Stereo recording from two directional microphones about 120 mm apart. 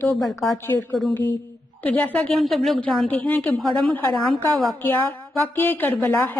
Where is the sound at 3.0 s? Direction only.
10° left (ahead or behind).